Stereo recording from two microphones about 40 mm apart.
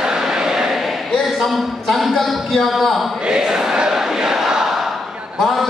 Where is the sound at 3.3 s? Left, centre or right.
Centre.